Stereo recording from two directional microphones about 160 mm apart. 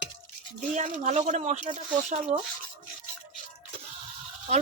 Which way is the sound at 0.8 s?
50° right (ahead or behind).